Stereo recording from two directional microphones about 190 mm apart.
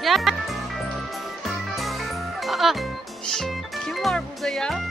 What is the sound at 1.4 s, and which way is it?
Music, centre (ahead or behind).